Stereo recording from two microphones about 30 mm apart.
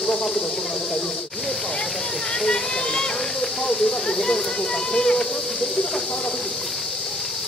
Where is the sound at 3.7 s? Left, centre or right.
Centre.